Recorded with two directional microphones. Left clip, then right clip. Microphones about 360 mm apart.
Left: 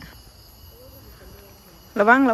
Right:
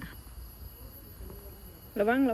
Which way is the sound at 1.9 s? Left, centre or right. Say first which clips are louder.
Left 11 dB; left.